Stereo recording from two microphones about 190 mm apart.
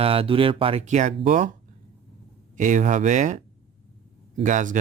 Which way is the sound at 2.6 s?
40° right (ahead or behind).